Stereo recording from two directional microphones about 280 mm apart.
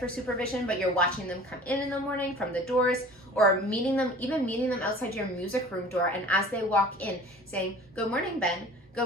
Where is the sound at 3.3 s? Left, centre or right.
Centre.